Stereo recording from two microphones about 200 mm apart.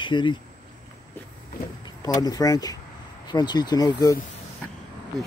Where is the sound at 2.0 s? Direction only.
20° left (ahead or behind).